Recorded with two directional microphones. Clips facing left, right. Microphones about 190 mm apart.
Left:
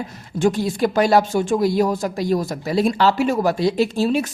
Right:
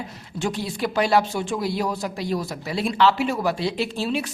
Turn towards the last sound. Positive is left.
turn(degrees=45)  # may be behind; listen again after turning